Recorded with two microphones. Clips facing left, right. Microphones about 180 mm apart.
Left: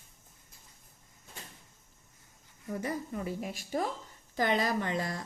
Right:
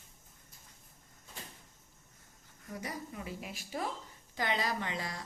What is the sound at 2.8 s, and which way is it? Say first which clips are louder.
A woman's voice: left 6 dB; 50° left (ahead or behind).